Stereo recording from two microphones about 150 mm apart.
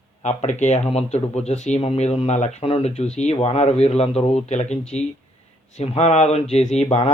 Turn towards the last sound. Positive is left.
turn(degrees=45)  # may be behind; listen again after turning